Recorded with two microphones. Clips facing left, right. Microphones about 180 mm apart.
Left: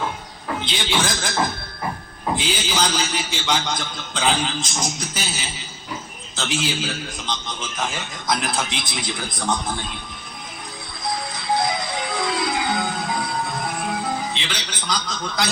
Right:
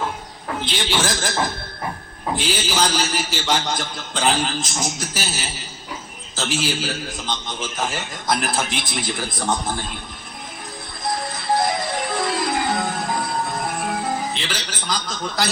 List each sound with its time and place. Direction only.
0.6 s a man's voice: centre (ahead or behind)
2.3 s a man's voice: centre (ahead or behind)
9.4 s a man's voice: 25° right (ahead or behind)
11.5 s music: centre (ahead or behind)
13.6 s music: 20° right (ahead or behind)
14.4 s a man's voice: 5° right (ahead or behind)